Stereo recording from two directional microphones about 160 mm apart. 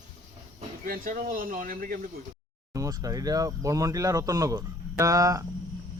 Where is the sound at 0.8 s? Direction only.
60° right (ahead or behind).